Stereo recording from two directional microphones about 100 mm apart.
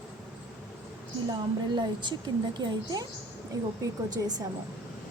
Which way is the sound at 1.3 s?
50° right (ahead or behind).